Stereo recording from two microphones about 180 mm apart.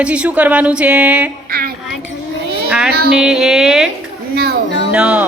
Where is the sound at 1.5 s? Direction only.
55° right (ahead or behind).